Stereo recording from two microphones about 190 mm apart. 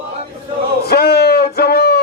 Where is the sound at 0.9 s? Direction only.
55° left (ahead or behind).